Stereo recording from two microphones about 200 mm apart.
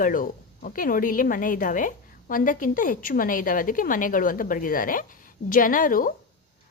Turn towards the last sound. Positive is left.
turn(degrees=45)  # may be behind; listen again after turning